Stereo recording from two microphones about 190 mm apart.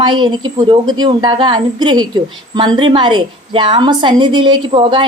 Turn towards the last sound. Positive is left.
turn(degrees=-25)  # may be behind; listen again after turning